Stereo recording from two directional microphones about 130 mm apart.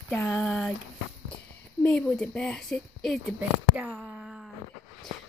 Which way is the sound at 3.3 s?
10° right (ahead or behind).